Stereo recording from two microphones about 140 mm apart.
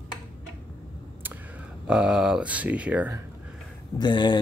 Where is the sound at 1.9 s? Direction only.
5° right (ahead or behind).